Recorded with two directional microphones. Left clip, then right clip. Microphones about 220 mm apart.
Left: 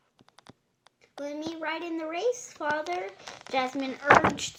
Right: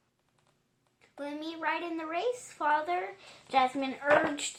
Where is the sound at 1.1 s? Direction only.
30° left (ahead or behind).